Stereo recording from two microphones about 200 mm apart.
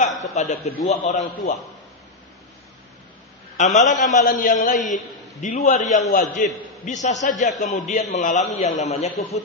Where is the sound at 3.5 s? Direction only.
35° left (ahead or behind).